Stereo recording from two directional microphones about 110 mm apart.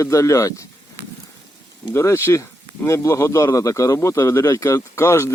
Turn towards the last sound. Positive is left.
turn(degrees=25)  # may be behind; listen again after turning